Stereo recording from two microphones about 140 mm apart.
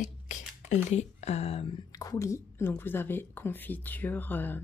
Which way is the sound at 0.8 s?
50° left (ahead or behind).